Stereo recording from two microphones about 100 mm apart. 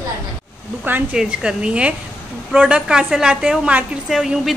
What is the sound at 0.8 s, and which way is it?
Speech, 20° right (ahead or behind).